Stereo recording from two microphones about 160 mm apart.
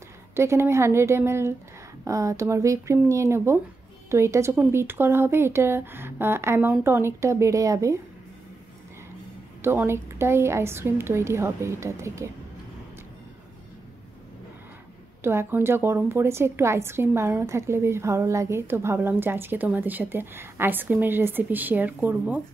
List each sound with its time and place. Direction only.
0.4 s a woman's voice: 15° right (ahead or behind)
9.6 s a woman's voice: 15° right (ahead or behind)
15.2 s a woman's voice: 15° right (ahead or behind)